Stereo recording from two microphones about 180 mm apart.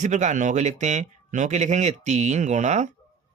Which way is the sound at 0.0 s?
40° right (ahead or behind).